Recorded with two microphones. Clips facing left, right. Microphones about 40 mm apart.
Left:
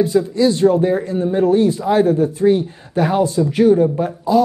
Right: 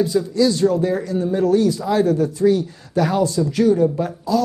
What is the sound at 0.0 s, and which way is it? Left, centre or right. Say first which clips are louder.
Speech: left 2 dB; left.